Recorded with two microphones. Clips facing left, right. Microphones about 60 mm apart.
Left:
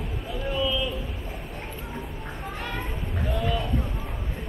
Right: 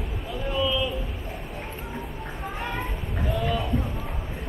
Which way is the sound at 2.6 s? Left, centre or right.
Centre.